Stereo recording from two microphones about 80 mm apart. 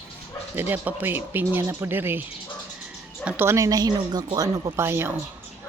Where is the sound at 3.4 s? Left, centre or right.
Right.